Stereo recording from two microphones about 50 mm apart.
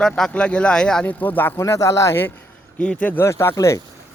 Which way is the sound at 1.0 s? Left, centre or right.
Left.